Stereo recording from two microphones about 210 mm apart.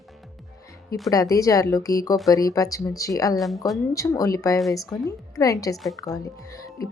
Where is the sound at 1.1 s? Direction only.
15° left (ahead or behind).